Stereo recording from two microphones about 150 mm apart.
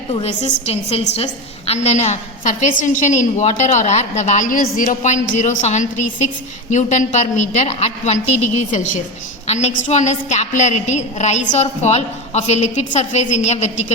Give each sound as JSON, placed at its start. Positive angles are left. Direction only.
{"t": 0.1, "sound": "a woman's voice", "side_deg": 45}
{"t": 4.9, "sound": "a woman's voice", "side_deg": 50}
{"t": 9.5, "sound": "a woman's voice", "side_deg": 45}